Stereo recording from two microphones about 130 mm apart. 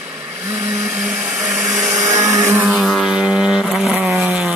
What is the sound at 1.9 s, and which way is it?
Blender, 70° right (ahead or behind).